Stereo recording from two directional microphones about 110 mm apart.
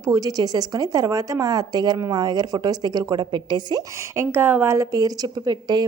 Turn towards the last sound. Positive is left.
turn(degrees=-40)  # may be behind; listen again after turning